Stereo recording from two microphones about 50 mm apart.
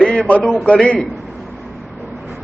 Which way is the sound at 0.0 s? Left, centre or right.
Centre.